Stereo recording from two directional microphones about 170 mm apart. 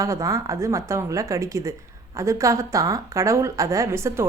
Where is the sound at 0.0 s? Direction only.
20° right (ahead or behind).